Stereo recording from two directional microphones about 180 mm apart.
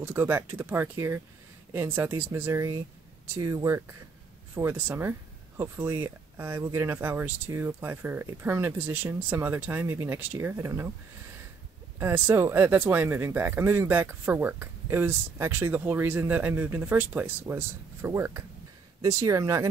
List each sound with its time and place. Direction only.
0.0 s speech: 15° right (ahead or behind)
12.0 s speech: 15° right (ahead or behind)